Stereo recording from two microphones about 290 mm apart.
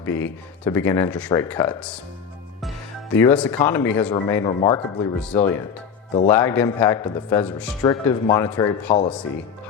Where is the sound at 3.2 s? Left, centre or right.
Centre.